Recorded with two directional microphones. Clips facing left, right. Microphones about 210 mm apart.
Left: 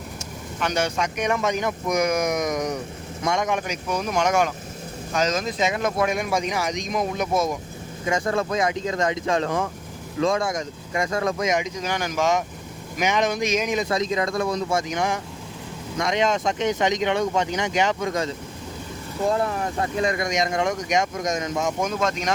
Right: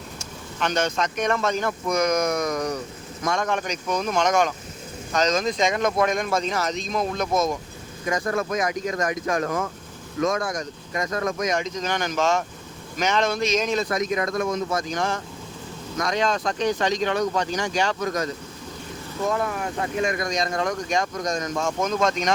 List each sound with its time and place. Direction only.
0.6 s speech: 10° left (ahead or behind)
8.0 s speech: 25° left (ahead or behind)
11.5 s speech: 10° left (ahead or behind)
13.9 s speech: 30° left (ahead or behind)
19.3 s speech: 35° left (ahead or behind)
20.2 s speech: 20° left (ahead or behind)